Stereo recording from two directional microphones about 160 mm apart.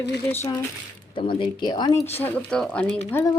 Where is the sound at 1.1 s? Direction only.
30° left (ahead or behind).